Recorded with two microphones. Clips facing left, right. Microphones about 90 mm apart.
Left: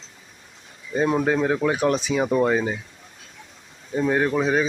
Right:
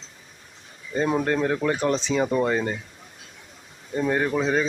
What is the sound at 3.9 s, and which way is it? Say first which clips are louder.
Speech: left 2 dB; 5° left (ahead or behind).